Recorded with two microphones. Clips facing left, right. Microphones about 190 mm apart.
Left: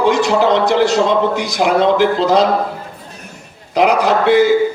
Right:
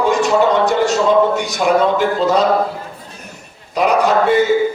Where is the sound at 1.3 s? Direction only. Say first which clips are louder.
Even; 75° left (ahead or behind).